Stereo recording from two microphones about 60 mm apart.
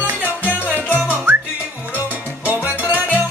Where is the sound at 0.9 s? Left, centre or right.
Right.